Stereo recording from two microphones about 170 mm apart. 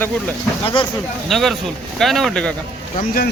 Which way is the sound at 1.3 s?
Centre (ahead or behind).